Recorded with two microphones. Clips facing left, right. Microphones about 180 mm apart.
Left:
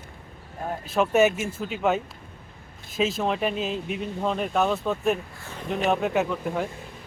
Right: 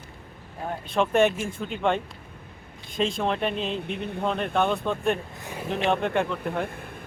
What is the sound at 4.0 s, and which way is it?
Speech, 60° right (ahead or behind).